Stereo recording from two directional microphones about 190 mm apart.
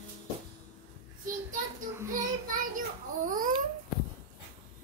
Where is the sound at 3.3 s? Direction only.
45° right (ahead or behind).